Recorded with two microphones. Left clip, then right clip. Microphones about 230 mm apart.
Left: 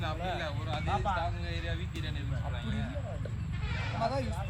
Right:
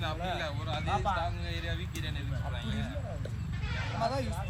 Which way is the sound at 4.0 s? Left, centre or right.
Right.